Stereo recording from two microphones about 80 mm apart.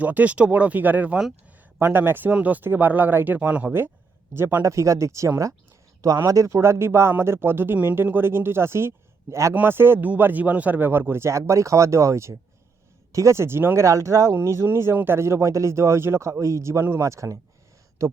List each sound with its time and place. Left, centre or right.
0.0 s speech: centre; by 18.1 s right